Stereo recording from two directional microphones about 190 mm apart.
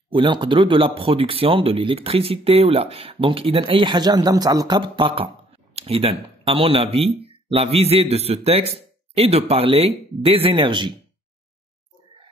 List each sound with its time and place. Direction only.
0.1 s a man's voice: 25° right (ahead or behind)